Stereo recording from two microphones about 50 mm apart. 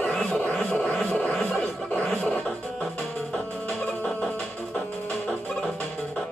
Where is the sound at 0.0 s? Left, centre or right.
Centre.